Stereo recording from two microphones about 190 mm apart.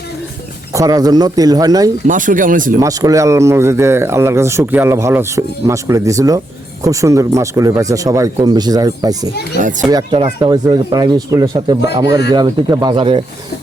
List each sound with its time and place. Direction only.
0.7 s speech: 20° right (ahead or behind)
2.0 s speech: 45° right (ahead or behind)
2.8 s speech: 20° right (ahead or behind)
9.6 s a child's voice: 40° right (ahead or behind)
9.9 s speech: 25° right (ahead or behind)